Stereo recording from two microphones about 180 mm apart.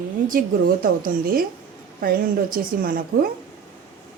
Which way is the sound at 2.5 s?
55° right (ahead or behind).